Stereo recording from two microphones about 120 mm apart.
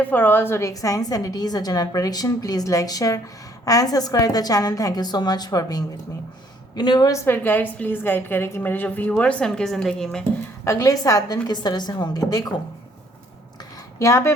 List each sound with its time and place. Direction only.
0.0 s a woman's voice: 15° left (ahead or behind); by 7.2 s 35° left (ahead or behind)
7.3 s a woman's voice: 15° left (ahead or behind)
10.6 s a woman's voice: 25° left (ahead or behind)
14.0 s a woman's voice: 25° left (ahead or behind)